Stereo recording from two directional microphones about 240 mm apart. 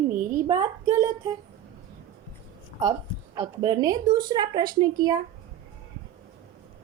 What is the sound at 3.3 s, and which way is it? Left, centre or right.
Speech, centre.